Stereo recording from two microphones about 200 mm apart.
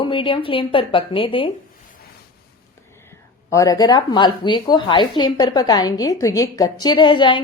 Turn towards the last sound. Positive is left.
turn(degrees=25)  # may be behind; listen again after turning